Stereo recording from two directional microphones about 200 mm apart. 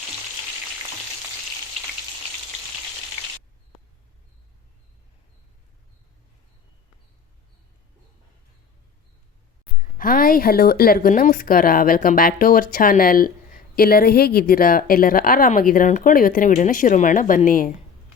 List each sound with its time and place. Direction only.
10.0 s a woman's voice: 45° left (ahead or behind)